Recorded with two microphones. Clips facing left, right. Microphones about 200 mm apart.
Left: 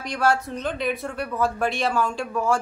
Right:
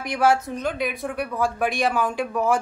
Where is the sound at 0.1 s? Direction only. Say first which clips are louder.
Right 2 dB; 10° right (ahead or behind).